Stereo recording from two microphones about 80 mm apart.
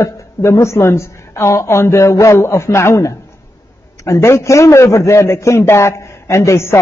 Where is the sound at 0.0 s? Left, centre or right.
Left.